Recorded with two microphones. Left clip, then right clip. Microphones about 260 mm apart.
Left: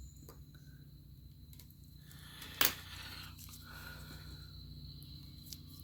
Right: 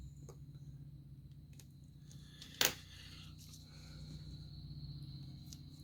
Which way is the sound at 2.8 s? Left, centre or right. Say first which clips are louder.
Left 7 dB; left.